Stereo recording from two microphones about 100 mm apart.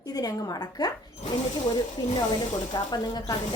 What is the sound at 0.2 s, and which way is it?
Speech, 40° left (ahead or behind).